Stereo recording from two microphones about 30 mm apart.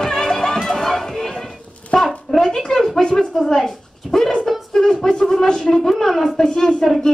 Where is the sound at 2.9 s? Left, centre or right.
Centre.